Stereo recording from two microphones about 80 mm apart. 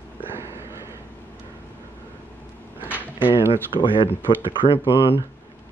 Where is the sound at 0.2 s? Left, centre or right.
Right.